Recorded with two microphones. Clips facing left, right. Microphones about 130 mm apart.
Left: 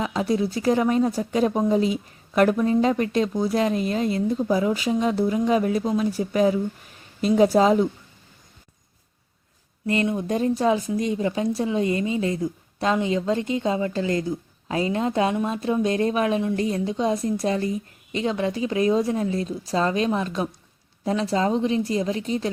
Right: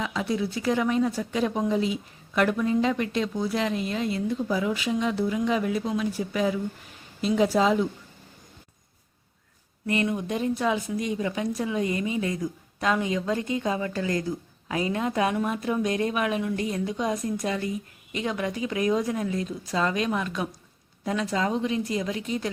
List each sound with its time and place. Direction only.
0.0 s speech: 40° left (ahead or behind)
9.8 s speech: 30° left (ahead or behind)